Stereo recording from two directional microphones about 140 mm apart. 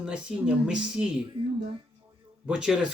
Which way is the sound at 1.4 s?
40° right (ahead or behind).